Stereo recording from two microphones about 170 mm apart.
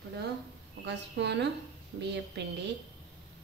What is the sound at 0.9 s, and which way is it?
A woman's voice, 90° right.